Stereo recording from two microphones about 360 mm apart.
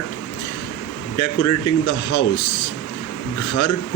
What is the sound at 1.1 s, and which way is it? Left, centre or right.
Speech, left.